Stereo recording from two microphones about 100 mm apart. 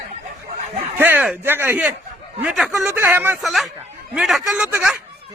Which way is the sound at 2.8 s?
20° right (ahead or behind).